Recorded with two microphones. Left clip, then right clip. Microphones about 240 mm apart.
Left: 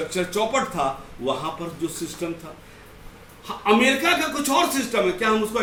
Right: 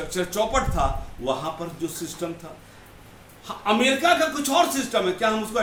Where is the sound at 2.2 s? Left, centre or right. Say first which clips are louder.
Left 1 dB; centre.